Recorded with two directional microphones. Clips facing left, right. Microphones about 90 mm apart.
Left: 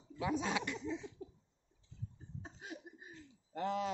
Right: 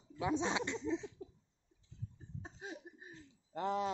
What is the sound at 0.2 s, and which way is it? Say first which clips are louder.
Speech: right 1 dB; 25° right (ahead or behind).